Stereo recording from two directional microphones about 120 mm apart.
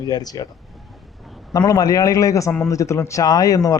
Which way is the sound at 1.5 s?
30° left (ahead or behind).